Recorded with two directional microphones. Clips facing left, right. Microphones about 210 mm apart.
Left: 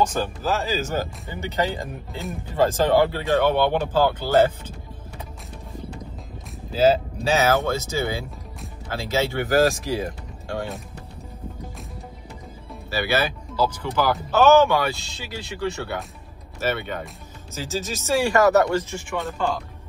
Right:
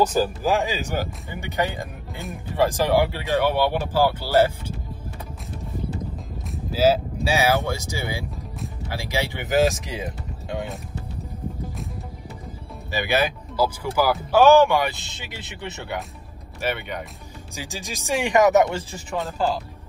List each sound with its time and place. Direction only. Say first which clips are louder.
0.0 s speech: right 3 dB; 5° right (ahead or behind)
6.5 s speech: left 1 dB; 5° right (ahead or behind)
12.9 s speech: right 1 dB; 15° right (ahead or behind)